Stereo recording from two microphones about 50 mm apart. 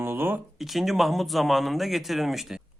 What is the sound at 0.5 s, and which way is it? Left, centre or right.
Speech, centre.